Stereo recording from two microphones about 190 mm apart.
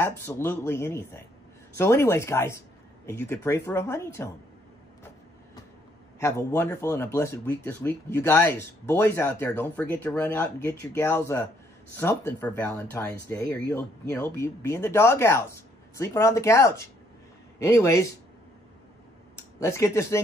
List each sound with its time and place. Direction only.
0.0 s speech: 15° left (ahead or behind)
6.2 s speech: 15° left (ahead or behind)
19.6 s speech: 15° left (ahead or behind)